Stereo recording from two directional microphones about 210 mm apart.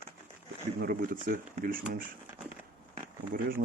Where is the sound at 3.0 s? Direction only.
40° right (ahead or behind).